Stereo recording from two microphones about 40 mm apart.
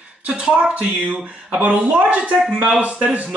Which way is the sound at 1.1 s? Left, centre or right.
Right.